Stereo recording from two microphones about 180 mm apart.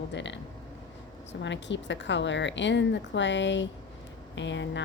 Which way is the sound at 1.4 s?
85° left.